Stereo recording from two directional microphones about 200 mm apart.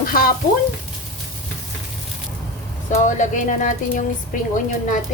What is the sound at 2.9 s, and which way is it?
Speech, 40° left (ahead or behind).